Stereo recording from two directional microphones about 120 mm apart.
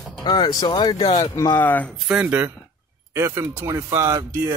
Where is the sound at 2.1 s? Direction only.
15° right (ahead or behind).